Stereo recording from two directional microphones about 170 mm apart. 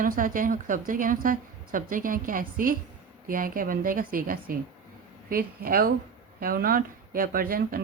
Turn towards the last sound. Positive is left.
turn(degrees=-60)  # may be behind; listen again after turning